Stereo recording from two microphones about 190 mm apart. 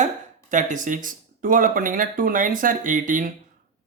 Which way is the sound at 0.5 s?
40° right (ahead or behind).